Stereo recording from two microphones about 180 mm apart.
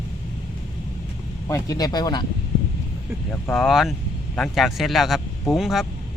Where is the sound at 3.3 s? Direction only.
5° left (ahead or behind).